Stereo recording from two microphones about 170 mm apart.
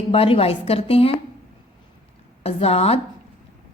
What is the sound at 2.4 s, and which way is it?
Speech, 35° left (ahead or behind).